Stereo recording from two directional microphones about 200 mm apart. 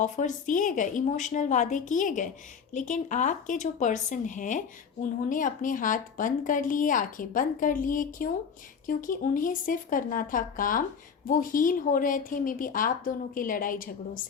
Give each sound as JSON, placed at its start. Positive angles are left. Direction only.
{"t": 0.0, "sound": "a woman's voice", "side_deg": 40}